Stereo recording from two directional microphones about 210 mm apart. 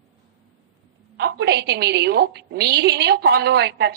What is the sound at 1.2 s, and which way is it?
A woman's voice, 50° right (ahead or behind).